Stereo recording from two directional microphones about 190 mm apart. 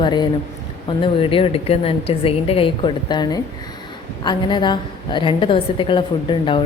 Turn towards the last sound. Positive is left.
turn(degrees=25)  # may be behind; listen again after turning